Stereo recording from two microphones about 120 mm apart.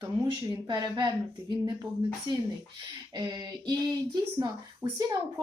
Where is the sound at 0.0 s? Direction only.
35° right (ahead or behind).